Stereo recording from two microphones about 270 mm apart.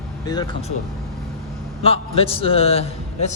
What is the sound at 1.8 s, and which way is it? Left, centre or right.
A man's voice, left.